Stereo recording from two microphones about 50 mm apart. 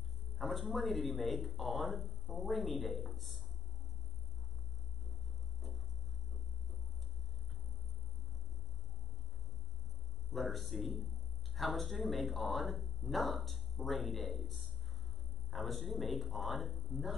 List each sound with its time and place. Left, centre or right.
0.4 s speech: centre
10.3 s speech: centre